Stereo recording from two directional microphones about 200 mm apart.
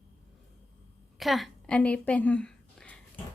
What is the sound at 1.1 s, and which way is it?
A woman's voice, centre (ahead or behind).